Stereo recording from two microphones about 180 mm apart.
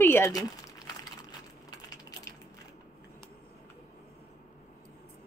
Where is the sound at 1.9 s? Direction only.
20° left (ahead or behind).